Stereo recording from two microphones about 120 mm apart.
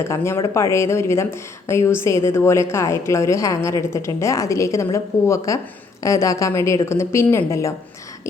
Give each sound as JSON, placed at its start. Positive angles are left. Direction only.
{"t": 0.0, "sound": "speech", "side_deg": 20}